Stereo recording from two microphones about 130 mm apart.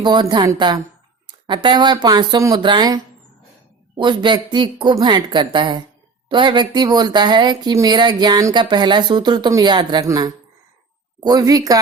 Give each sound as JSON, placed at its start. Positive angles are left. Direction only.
{"t": 0.0, "sound": "speech", "side_deg": -35}